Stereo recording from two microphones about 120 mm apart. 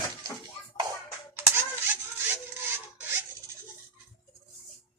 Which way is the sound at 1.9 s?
20° right (ahead or behind).